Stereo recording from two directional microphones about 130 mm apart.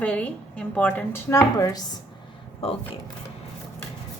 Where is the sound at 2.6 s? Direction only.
45° left (ahead or behind).